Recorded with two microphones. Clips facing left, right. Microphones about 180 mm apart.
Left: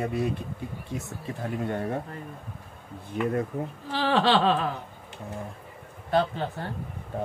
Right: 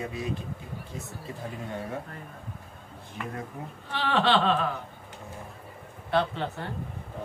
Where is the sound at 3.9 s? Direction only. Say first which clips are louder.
Left 2 dB; 35° left (ahead or behind).